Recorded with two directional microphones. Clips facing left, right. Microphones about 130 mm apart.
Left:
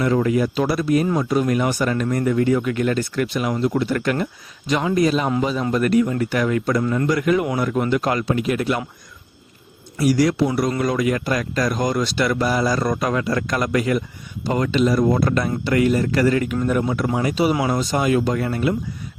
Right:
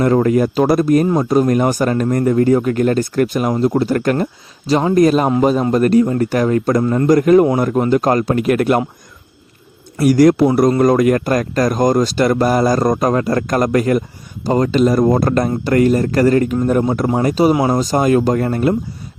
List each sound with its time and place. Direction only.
0.0 s speech: 45° right (ahead or behind)
5.6 s speech: 35° right (ahead or behind); by 8.8 s 55° right (ahead or behind)
10.0 s speech: 50° right (ahead or behind)